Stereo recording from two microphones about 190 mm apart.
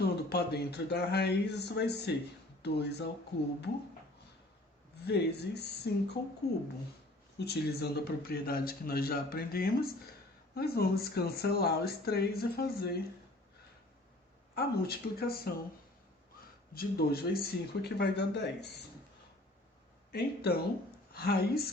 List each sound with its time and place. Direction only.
0.0 s speech: 55° left (ahead or behind)
5.0 s a man's voice: 60° left (ahead or behind)
14.5 s speech: 55° left (ahead or behind)
16.7 s speech: 55° left (ahead or behind)
20.1 s speech: 55° left (ahead or behind)